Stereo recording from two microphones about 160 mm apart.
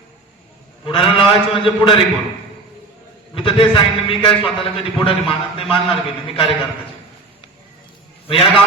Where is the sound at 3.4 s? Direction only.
35° left (ahead or behind).